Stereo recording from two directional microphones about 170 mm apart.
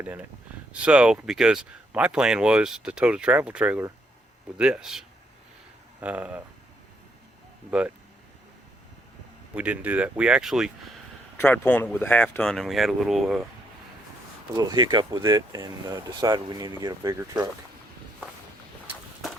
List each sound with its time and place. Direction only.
0.0 s speech: 10° right (ahead or behind)
7.7 s speech: 5° right (ahead or behind)
9.6 s speech: 10° right (ahead or behind)
11.3 s speech: 10° left (ahead or behind)
14.5 s speech: 20° right (ahead or behind)